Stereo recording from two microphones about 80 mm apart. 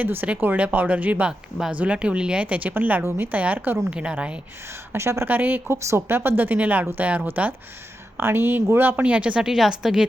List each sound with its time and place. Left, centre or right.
0.0 s speech: right
1.3 s a woman's voice: centre
4.9 s a woman's voice: right; by 10.1 s centre